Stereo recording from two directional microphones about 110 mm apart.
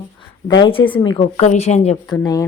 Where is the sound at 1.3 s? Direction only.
80° left.